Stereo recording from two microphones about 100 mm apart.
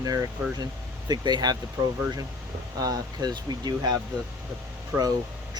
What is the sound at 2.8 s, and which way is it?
Speech, 40° right (ahead or behind).